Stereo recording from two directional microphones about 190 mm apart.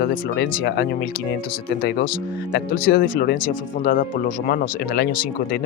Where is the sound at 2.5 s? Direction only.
50° left (ahead or behind).